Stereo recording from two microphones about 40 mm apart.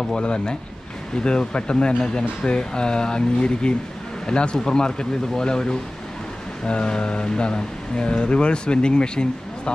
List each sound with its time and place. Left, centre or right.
0.2 s speech: left